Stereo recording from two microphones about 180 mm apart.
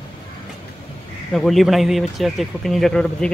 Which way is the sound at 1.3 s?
Centre (ahead or behind).